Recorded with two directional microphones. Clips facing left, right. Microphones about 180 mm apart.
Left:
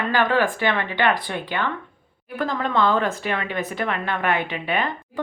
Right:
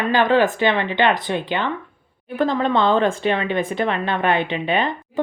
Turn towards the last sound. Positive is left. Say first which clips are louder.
# right 4 dB
turn(degrees=-25)  # may be behind; listen again after turning